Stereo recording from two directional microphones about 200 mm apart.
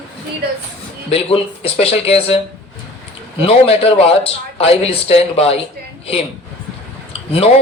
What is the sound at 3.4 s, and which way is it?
Speech, 30° left (ahead or behind).